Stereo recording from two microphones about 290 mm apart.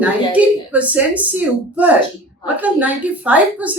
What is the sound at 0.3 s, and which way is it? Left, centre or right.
Speech, centre.